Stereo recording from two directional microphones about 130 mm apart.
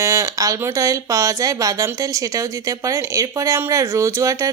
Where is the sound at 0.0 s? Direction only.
20° right (ahead or behind).